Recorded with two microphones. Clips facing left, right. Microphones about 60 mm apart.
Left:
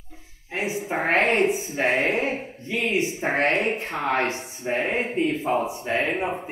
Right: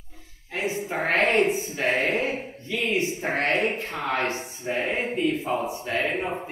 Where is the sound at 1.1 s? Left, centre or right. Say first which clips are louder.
Even; left.